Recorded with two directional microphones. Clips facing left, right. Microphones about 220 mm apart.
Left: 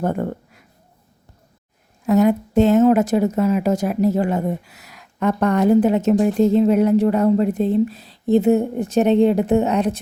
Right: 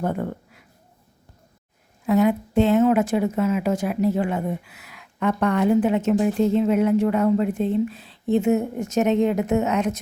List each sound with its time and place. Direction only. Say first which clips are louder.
0.0 s speech: left 3 dB; 45° left (ahead or behind)
2.0 s a woman's voice: left 3 dB; 45° left (ahead or behind)